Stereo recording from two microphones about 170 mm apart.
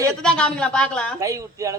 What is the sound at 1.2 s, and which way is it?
Speech, 20° right (ahead or behind).